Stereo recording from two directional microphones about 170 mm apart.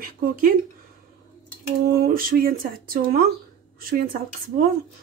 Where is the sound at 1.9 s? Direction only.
60° right (ahead or behind).